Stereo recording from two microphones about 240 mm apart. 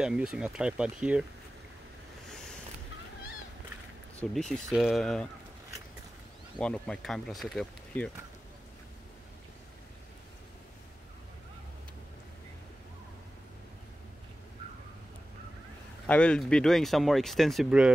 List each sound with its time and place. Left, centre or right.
0.0 s speech: centre
4.2 s speech: centre
6.6 s speech: centre
16.1 s speech: centre